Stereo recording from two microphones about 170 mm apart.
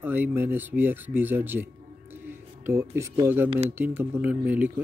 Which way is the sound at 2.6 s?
15° right (ahead or behind).